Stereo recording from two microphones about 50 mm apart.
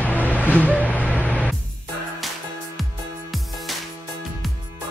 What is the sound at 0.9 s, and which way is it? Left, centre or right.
Music, left.